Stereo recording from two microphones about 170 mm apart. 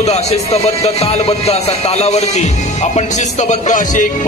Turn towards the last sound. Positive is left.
turn(degrees=50)  # may be behind; listen again after turning